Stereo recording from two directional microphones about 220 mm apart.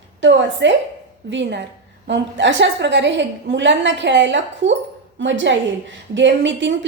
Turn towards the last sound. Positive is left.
turn(degrees=-55)  # may be behind; listen again after turning